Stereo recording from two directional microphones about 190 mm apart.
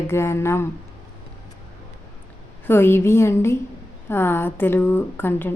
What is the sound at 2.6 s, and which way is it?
A woman's voice, 10° left (ahead or behind).